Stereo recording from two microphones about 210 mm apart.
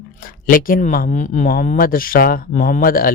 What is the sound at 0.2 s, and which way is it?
Speech, 40° left (ahead or behind).